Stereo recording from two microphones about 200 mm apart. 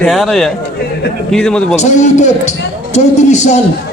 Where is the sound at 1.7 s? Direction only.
35° left (ahead or behind).